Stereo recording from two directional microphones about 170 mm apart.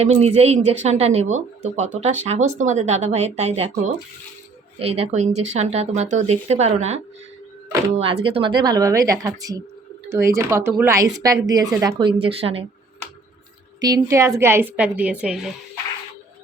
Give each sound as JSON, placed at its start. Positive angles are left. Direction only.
{"t": 0.0, "sound": "speech", "side_deg": -40}
{"t": 13.8, "sound": "a woman's voice", "side_deg": -20}